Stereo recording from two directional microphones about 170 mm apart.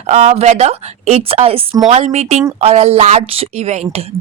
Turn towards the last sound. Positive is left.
turn(degrees=-40)  # may be behind; listen again after turning